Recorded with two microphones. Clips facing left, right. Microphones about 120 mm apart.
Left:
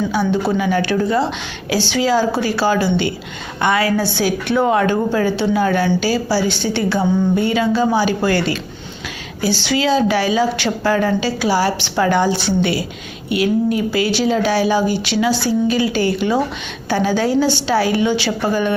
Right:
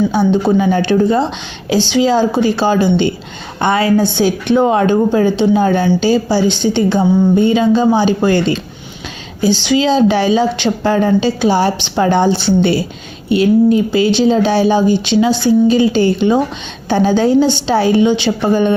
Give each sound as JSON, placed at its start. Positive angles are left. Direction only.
{"t": 0.1, "sound": "a woman's voice", "side_deg": -25}